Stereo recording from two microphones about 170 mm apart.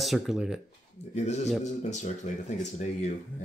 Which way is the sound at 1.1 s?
40° left (ahead or behind).